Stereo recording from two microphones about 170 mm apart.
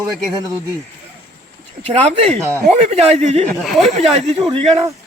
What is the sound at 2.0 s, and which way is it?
Speech, 40° right (ahead or behind).